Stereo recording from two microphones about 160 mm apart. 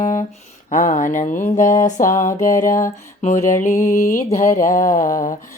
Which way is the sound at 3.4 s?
55° left (ahead or behind).